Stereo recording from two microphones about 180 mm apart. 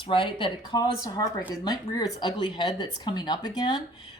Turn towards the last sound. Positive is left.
turn(degrees=20)  # may be behind; listen again after turning